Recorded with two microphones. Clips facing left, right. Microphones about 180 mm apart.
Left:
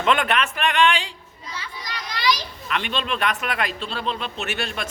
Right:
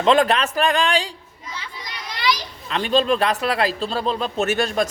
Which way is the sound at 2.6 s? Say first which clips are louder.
Right 8 dB; 35° right (ahead or behind).